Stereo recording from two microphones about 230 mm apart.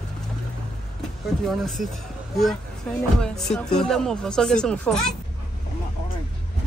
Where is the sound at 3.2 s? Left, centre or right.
Centre.